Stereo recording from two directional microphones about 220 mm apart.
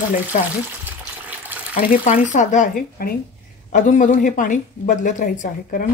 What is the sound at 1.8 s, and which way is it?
Speech, 40° left (ahead or behind).